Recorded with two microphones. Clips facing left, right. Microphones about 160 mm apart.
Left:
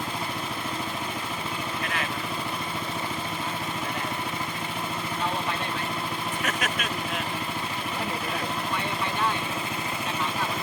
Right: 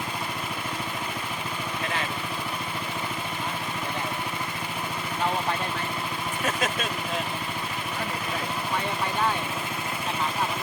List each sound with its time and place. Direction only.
6.4 s vehicle: 30° right (ahead or behind)